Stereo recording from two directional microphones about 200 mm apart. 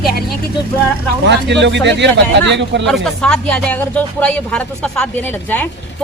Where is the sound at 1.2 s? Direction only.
60° right (ahead or behind).